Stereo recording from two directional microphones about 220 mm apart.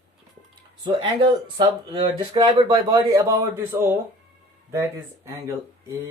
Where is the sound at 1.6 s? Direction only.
20° right (ahead or behind).